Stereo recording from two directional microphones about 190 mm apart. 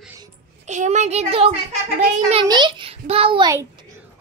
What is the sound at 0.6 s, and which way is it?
A child's voice, 40° right (ahead or behind).